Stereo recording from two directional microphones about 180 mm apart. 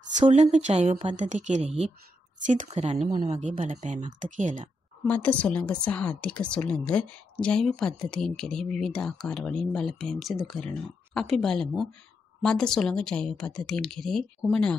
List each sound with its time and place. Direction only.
0.2 s speech: 40° right (ahead or behind)
5.0 s a woman's voice: 10° left (ahead or behind)